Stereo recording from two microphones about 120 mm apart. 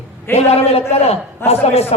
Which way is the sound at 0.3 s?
60° left (ahead or behind).